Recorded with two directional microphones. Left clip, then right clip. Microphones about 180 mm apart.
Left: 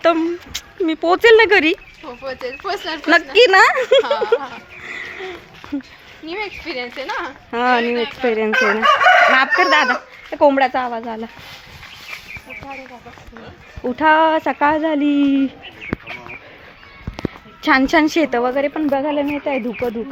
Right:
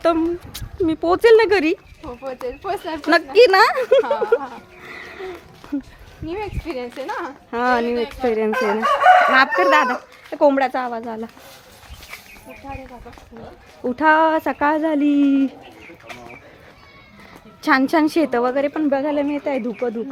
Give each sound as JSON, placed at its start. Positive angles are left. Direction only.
{"t": 0.0, "sound": "a woman's voice", "side_deg": -5}
{"t": 2.0, "sound": "speech", "side_deg": -60}
{"t": 3.0, "sound": "a woman's voice", "side_deg": 5}
{"t": 6.2, "sound": "speech", "side_deg": -45}
{"t": 7.5, "sound": "speech", "side_deg": 5}
{"t": 8.4, "sound": "speech", "side_deg": -60}
{"t": 9.6, "sound": "a woman's voice", "side_deg": -5}
{"t": 13.8, "sound": "a woman's voice", "side_deg": 0}
{"t": 17.6, "sound": "a woman's voice", "side_deg": 10}